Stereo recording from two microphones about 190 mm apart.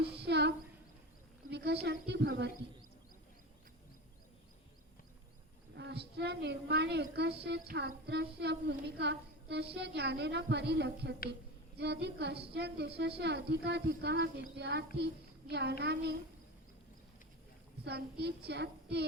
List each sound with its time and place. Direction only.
0.0 s a sound: 60° right (ahead or behind)
1.5 s child singing: 60° right (ahead or behind)
5.7 s child singing: 60° right (ahead or behind)
14.9 s a child's voice: 60° right (ahead or behind)
15.8 s child singing: 60° right (ahead or behind)
17.8 s child singing: 60° right (ahead or behind)